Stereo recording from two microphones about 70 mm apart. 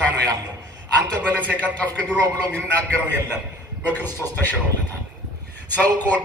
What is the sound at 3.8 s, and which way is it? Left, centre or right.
Speech, left.